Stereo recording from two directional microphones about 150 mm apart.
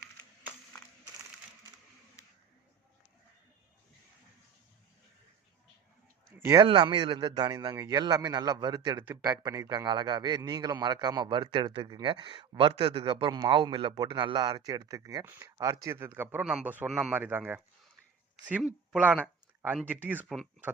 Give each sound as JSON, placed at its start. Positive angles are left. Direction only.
{"t": 6.6, "sound": "a man's voice", "side_deg": -35}